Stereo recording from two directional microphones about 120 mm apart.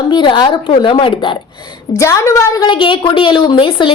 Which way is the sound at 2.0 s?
25° left (ahead or behind).